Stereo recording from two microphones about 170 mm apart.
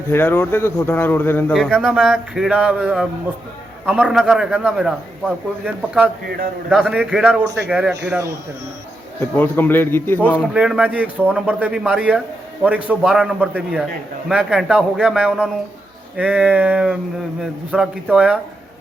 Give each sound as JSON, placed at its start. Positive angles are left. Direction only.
{"t": 0.1, "sound": "a man's voice", "side_deg": 15}
{"t": 9.3, "sound": "a man's voice", "side_deg": 10}
{"t": 10.5, "sound": "a man's voice", "side_deg": -5}